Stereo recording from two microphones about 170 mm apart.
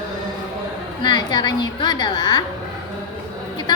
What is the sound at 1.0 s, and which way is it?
A woman's voice, 25° left (ahead or behind).